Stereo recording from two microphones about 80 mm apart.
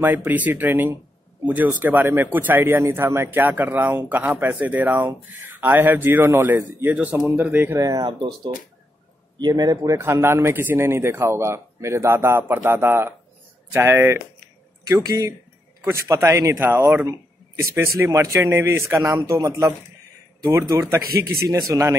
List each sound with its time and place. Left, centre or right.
0.0 s a man's voice: right
7.8 s a man's voice: right
8.2 s speech: right
9.4 s speech: right
9.9 s a man's voice: right
14.9 s a man's voice: right
15.8 s a man's voice: right